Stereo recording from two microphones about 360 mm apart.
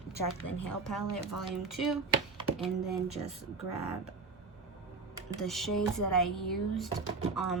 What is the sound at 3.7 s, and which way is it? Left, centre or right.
Speech, left.